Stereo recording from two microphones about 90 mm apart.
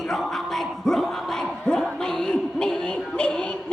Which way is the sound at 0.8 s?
5° left (ahead or behind).